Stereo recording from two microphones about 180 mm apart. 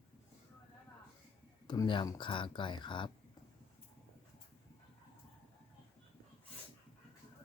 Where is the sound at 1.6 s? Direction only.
25° left (ahead or behind).